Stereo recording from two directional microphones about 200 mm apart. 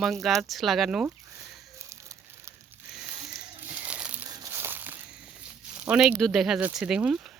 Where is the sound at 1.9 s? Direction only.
15° right (ahead or behind).